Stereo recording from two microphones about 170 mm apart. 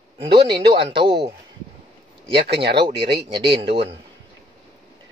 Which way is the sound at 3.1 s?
30° right (ahead or behind).